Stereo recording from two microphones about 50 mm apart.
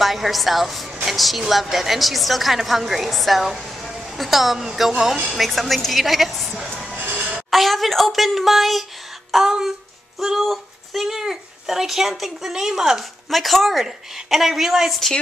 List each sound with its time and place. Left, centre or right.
0.0 s a woman's voice: centre
7.0 s a sound: right
7.5 s a woman's voice: centre
13.3 s a woman's voice: centre